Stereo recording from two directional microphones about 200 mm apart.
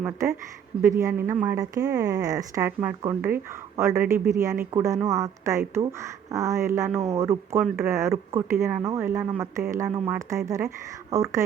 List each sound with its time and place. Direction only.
0.0 s speech: 15° right (ahead or behind)